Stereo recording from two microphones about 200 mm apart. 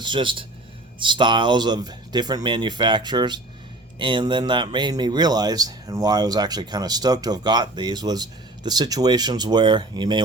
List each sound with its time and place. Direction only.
0.0 s speech: 25° right (ahead or behind)